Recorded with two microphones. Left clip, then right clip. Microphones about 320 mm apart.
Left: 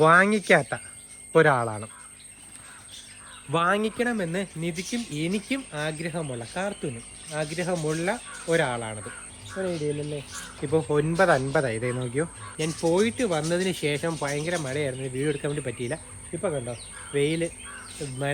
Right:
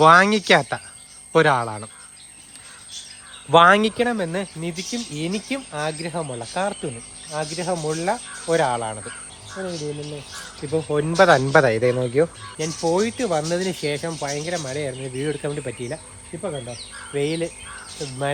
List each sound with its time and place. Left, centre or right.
0.0 s speech: centre
3.5 s speech: right
3.9 s speech: centre
11.1 s speech: right
11.7 s speech: centre
17.2 s speech: centre